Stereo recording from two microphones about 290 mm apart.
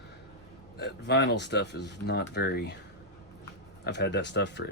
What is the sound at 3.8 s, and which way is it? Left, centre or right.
Speech, left.